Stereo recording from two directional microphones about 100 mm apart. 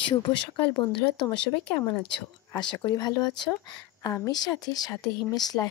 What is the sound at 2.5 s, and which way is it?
Speech, 45° left (ahead or behind).